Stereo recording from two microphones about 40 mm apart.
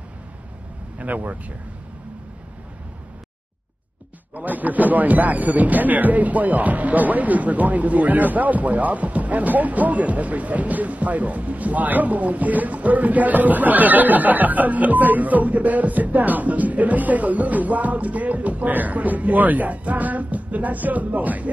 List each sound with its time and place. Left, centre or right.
0.9 s speech: right
4.5 s speech: right